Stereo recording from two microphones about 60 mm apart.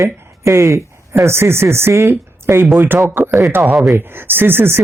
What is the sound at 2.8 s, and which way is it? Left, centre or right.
Speech, right.